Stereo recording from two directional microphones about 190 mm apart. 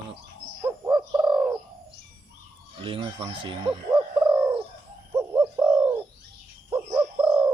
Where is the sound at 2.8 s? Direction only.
25° right (ahead or behind).